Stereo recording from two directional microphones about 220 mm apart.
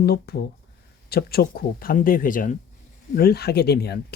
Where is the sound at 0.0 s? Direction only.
45° left (ahead or behind).